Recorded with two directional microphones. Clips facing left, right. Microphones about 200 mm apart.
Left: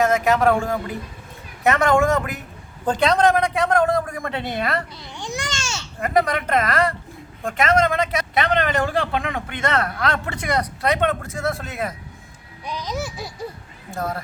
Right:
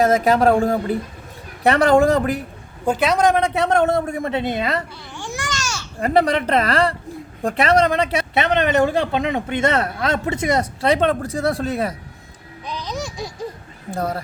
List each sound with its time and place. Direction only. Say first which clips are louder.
0.0 s a woman's voice: right 2 dB; 30° right (ahead or behind)
2.8 s a man's voice: right 1 dB; 10° right (ahead or behind)
3.3 s speech: right 2 dB; 25° right (ahead or behind)
5.1 s babbling: right 1 dB; 20° left (ahead or behind)
6.0 s a woman's voice: right 3 dB; 30° right (ahead or behind)
12.6 s babbling: even; 10° left (ahead or behind)
13.9 s a woman's voice: right 3 dB; 35° right (ahead or behind)